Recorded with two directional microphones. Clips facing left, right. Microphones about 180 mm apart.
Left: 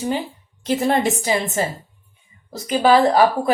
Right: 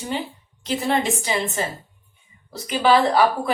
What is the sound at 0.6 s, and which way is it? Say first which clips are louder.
Speech: left 4 dB; 50° left (ahead or behind).